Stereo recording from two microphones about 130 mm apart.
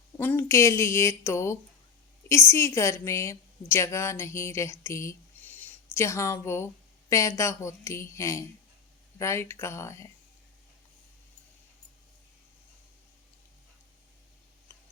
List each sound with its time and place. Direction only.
0.2 s a woman's voice: 20° left (ahead or behind)